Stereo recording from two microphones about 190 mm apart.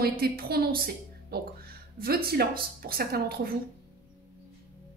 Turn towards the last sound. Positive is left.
turn(degrees=-55)  # may be behind; listen again after turning